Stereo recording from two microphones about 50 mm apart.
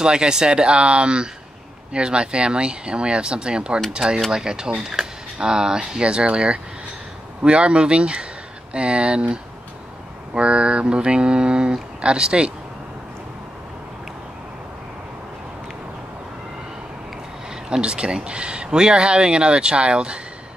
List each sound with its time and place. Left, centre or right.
0.0 s speech: centre
4.8 s a sound: centre
5.9 s speech: centre
17.6 s speech: centre